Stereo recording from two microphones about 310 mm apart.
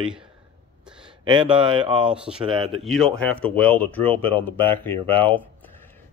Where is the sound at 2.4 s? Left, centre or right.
Centre.